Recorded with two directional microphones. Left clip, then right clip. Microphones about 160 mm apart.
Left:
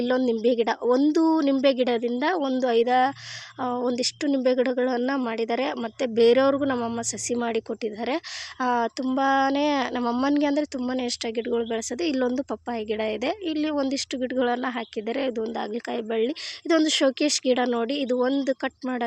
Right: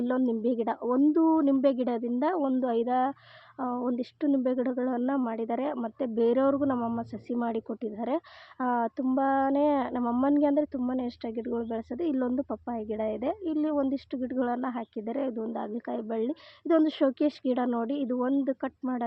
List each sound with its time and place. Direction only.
0.0 s a woman's voice: 15° left (ahead or behind)
8.6 s a woman's voice: 15° left (ahead or behind)